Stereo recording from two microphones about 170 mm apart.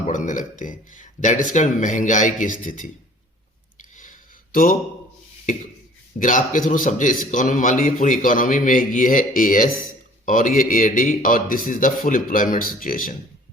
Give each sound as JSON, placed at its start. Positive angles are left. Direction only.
{"t": 0.0, "sound": "a man's voice", "side_deg": 45}
{"t": 3.9, "sound": "a sound", "side_deg": 55}
{"t": 6.1, "sound": "a man's voice", "side_deg": 50}